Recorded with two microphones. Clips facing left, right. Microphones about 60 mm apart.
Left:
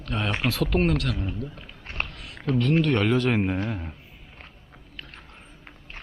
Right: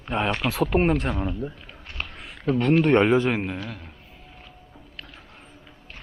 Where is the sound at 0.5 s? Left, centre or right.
Centre.